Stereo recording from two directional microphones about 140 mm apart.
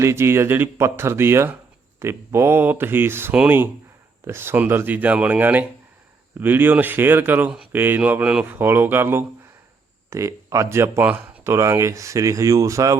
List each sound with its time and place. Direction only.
0.0 s speech: 20° right (ahead or behind)